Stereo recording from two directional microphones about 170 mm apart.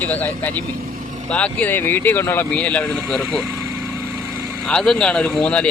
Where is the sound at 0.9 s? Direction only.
50° right (ahead or behind).